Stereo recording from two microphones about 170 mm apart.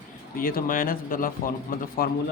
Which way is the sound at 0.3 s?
55° left (ahead or behind).